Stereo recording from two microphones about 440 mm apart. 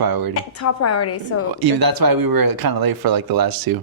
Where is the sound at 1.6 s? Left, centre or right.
Right.